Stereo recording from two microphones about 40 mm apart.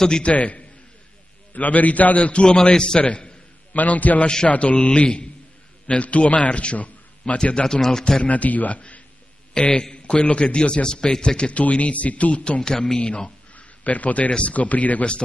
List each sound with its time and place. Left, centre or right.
0.2 s a man's voice: left
2.7 s a man's voice: centre
3.0 s a man's voice: left
3.7 s a man's voice: left
7.5 s a man's voice: centre
8.2 s speech: left
9.8 s a man's voice: left
13.6 s a sound: left
14.3 s speech: left